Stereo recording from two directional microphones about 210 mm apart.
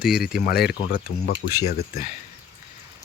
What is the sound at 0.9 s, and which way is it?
Speech, 45° left (ahead or behind).